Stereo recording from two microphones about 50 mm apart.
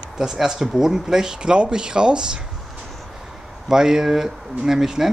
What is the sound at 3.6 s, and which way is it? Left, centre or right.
Speech, centre.